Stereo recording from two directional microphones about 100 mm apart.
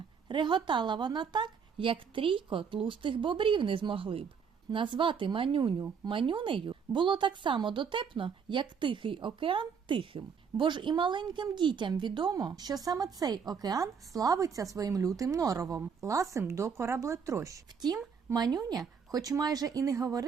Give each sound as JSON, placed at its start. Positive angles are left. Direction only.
{"t": 0.3, "sound": "a woman's voice", "side_deg": -50}